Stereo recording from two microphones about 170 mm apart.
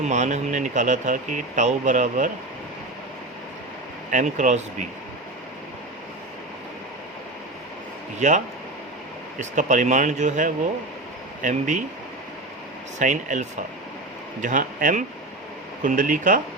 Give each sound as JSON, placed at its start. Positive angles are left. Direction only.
{"t": 0.0, "sound": "speech", "side_deg": -45}
{"t": 4.1, "sound": "speech", "side_deg": -45}
{"t": 9.4, "sound": "speech", "side_deg": -45}
{"t": 13.0, "sound": "speech", "side_deg": -45}